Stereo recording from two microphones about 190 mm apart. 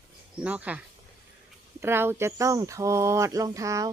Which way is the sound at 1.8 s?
10° right (ahead or behind).